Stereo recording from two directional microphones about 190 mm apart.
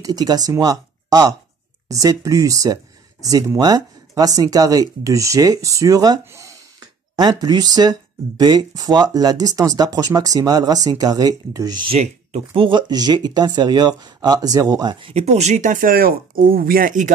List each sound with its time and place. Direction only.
0.0 s speech: 20° right (ahead or behind)
11.9 s speech: 35° right (ahead or behind)